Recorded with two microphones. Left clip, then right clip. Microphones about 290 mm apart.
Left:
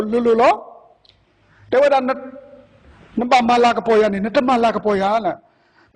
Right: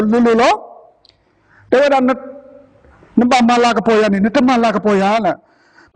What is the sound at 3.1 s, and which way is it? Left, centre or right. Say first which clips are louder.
A man's voice: right 2 dB; right.